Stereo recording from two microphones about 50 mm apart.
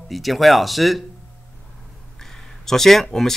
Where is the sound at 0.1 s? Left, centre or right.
Centre.